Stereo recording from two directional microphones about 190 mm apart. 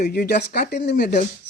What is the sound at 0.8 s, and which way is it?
Speech, 60° left (ahead or behind).